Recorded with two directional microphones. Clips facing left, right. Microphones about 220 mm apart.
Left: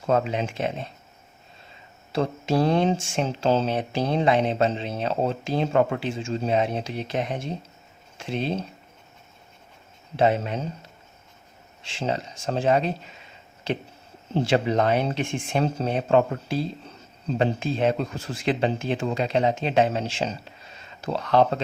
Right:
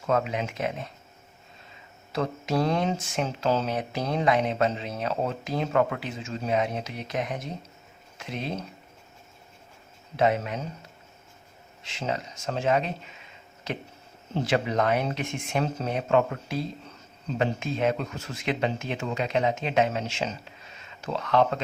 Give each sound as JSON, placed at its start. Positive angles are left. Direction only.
{"t": 0.1, "sound": "speech", "side_deg": 30}
{"t": 2.1, "sound": "speech", "side_deg": 30}
{"t": 10.2, "sound": "speech", "side_deg": 30}
{"t": 11.8, "sound": "speech", "side_deg": 30}